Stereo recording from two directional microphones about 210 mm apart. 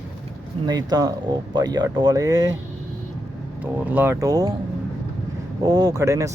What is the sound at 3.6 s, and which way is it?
Speech, 5° right (ahead or behind).